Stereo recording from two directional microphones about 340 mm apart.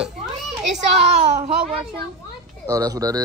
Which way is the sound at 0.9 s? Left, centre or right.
Centre.